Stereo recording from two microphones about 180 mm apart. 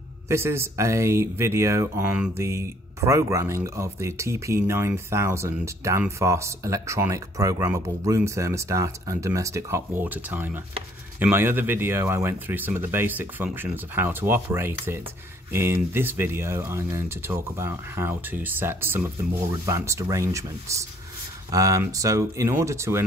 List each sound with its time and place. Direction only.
0.3 s speech: 15° right (ahead or behind)